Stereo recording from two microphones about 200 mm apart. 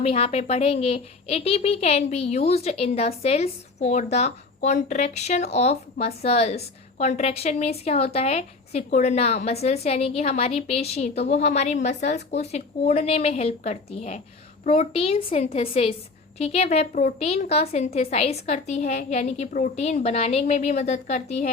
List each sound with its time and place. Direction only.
0.0 s a woman's voice: 30° left (ahead or behind)